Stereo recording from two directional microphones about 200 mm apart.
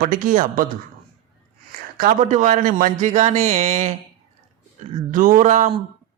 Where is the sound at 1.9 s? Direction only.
40° right (ahead or behind).